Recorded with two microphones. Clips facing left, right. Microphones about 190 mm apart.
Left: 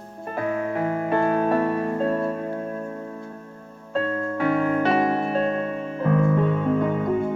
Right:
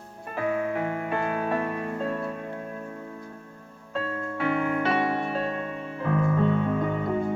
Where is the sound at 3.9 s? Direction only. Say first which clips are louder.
Left 6 dB; 45° left (ahead or behind).